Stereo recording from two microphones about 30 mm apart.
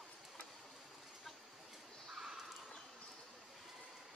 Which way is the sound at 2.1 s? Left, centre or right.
Centre.